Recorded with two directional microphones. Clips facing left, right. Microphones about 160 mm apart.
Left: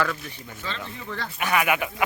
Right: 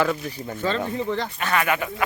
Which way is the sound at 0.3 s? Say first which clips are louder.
Right 10 dB; 40° right (ahead or behind).